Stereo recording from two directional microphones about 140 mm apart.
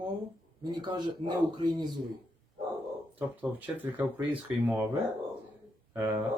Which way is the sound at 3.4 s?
10° right (ahead or behind).